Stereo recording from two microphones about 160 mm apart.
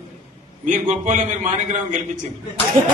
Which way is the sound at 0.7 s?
50° right (ahead or behind).